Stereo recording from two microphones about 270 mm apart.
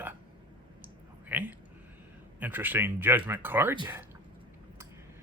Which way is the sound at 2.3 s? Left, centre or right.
Centre.